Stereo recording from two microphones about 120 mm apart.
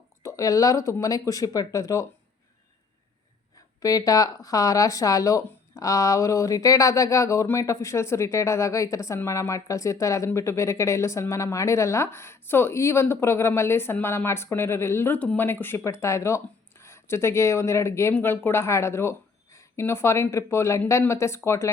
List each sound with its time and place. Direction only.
0.2 s speech: 25° left (ahead or behind)
3.8 s speech: 30° left (ahead or behind)